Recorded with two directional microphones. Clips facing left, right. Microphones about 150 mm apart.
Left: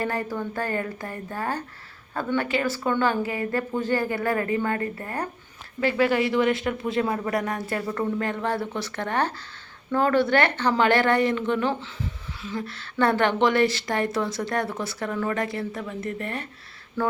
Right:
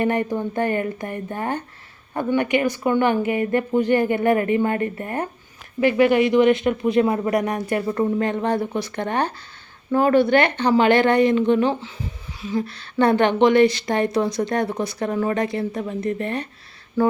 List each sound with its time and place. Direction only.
0.0 s speech: 20° right (ahead or behind)